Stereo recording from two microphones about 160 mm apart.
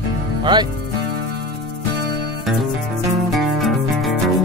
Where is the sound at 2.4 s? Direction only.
Centre (ahead or behind).